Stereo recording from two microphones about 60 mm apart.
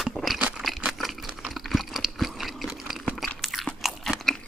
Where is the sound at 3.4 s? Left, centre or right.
Centre.